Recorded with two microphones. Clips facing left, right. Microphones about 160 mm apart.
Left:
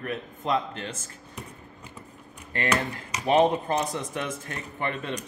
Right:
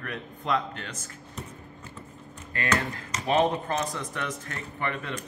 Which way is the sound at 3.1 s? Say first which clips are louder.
Left 3 dB; 20° left (ahead or behind).